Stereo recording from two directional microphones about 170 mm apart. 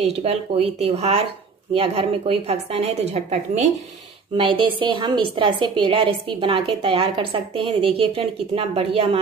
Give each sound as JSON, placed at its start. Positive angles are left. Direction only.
{"t": 0.0, "sound": "a woman's voice", "side_deg": -35}
{"t": 4.4, "sound": "a woman's voice", "side_deg": -30}